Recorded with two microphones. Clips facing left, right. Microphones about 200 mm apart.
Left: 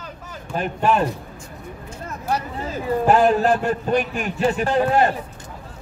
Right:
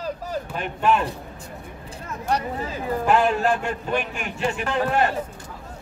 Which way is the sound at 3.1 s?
40° left (ahead or behind).